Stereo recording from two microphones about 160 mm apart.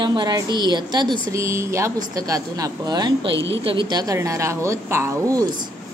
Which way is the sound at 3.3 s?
90° right.